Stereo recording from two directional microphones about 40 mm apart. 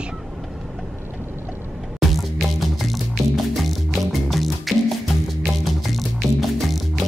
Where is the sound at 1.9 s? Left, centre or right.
Centre.